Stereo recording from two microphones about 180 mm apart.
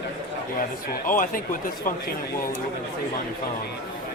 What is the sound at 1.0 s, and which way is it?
Speech, 50° left (ahead or behind).